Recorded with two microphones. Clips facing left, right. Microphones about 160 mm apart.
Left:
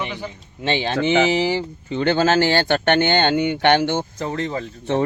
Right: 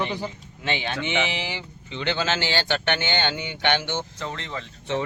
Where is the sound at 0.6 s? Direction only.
30° left (ahead or behind); by 4.1 s 50° left (ahead or behind).